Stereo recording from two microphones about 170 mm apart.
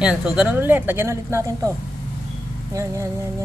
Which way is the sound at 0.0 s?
5° right (ahead or behind).